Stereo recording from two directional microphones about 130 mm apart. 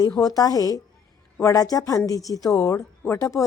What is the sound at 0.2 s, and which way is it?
Speech, 30° left (ahead or behind).